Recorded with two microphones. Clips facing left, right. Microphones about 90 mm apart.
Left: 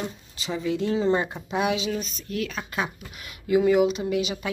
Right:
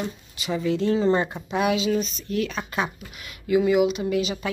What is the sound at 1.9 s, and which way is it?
Speech, 5° left (ahead or behind).